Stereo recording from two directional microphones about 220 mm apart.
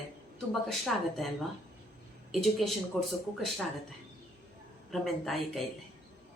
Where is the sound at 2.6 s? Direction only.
Centre (ahead or behind).